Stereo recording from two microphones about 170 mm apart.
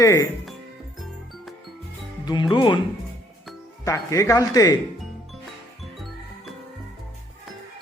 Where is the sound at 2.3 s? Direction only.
25° left (ahead or behind).